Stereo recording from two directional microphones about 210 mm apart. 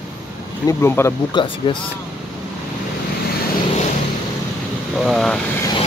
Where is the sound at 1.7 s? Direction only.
25° left (ahead or behind).